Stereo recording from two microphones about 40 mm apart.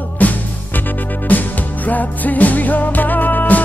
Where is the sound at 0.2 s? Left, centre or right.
Left.